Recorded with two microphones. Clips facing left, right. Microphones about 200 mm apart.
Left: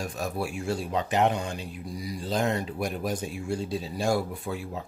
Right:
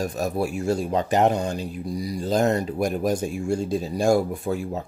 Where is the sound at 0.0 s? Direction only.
40° right (ahead or behind).